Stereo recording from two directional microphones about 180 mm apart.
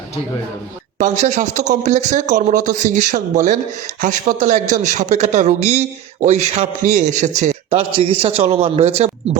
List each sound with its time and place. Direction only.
0.9 s a man's voice: 40° right (ahead or behind)